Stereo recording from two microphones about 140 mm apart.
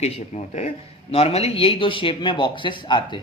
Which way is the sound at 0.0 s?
55° left (ahead or behind).